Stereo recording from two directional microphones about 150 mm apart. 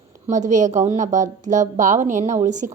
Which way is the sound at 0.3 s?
55° right (ahead or behind).